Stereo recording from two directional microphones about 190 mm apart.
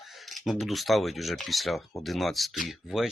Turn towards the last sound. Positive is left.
turn(degrees=0)  # may be behind; listen again after turning